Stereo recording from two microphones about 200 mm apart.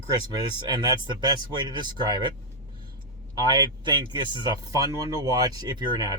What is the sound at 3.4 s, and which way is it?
Speech, 20° right (ahead or behind).